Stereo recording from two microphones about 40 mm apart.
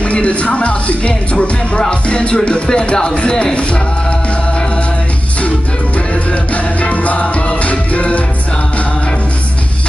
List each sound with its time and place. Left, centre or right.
0.0 s speech: left
6.5 s music: left